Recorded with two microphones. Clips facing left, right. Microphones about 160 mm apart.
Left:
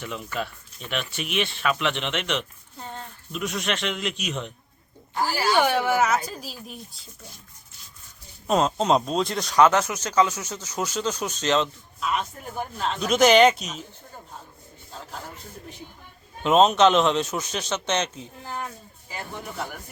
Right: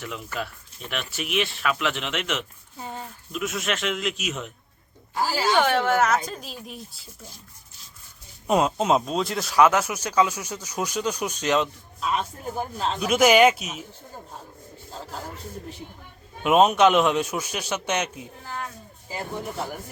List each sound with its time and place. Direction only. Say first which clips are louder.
0.3 s speech: left 1 dB; centre (ahead or behind)
5.3 s speech: right 1 dB; 15° right (ahead or behind)
5.5 s speech: even; 10° left (ahead or behind)
8.4 s speech: even; 10° right (ahead or behind)
11.9 s a man's voice: right 1 dB; 30° right (ahead or behind)
13.0 s speech: left 1 dB; 10° right (ahead or behind)
16.4 s speech: even; 10° right (ahead or behind)